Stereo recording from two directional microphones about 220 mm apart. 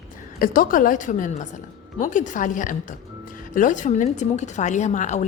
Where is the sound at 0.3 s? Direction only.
40° left (ahead or behind).